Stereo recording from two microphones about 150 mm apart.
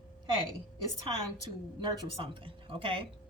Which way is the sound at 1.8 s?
30° right (ahead or behind).